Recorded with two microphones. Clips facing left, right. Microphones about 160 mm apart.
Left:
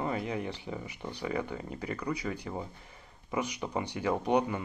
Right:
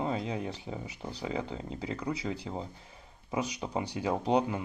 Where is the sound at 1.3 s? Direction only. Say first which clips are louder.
Left 1 dB; 20° right (ahead or behind).